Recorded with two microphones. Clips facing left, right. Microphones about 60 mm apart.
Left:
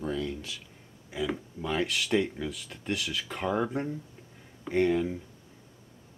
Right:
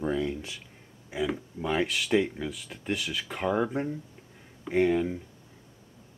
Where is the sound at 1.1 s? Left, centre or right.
Centre.